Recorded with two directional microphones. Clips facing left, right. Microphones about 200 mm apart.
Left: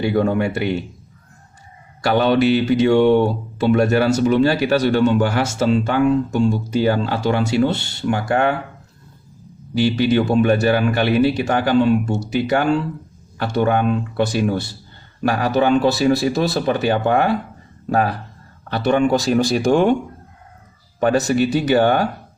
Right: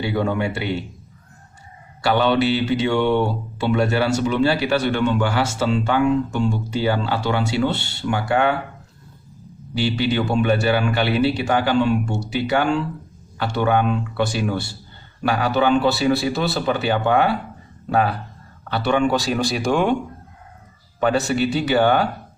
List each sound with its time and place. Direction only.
0.0 s a man's voice: 45° left (ahead or behind)
2.0 s a man's voice: 45° left (ahead or behind)
9.8 s a man's voice: 45° left (ahead or behind)
21.0 s a man's voice: 45° left (ahead or behind)